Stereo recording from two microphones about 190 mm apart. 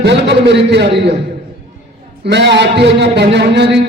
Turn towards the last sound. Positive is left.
turn(degrees=-65)  # may be behind; listen again after turning